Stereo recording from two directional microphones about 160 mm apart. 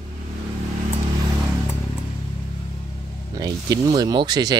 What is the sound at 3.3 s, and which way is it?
Speech, 25° right (ahead or behind).